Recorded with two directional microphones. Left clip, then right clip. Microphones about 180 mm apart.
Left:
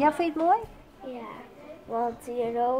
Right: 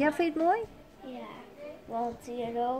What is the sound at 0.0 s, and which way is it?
Speech, 30° right (ahead or behind).